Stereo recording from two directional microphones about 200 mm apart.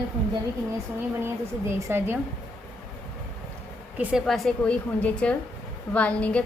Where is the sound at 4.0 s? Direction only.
5° right (ahead or behind).